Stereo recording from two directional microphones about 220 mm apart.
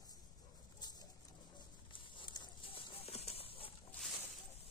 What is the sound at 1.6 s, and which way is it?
Horse, 20° left (ahead or behind).